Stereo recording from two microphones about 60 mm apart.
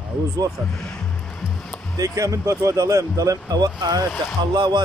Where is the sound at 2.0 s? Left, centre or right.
Right.